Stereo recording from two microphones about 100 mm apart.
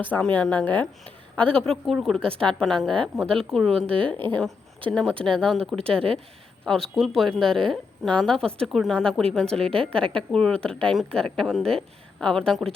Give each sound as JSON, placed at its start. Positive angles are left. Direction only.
{"t": 0.0, "sound": "a woman's voice", "side_deg": 15}
{"t": 5.5, "sound": "speech", "side_deg": -75}
{"t": 6.7, "sound": "a woman's voice", "side_deg": 0}